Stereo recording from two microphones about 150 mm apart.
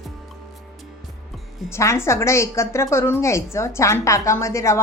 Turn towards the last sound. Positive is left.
turn(degrees=20)  # may be behind; listen again after turning